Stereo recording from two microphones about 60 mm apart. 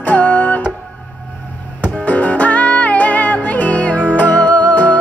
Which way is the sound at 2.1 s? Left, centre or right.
Left.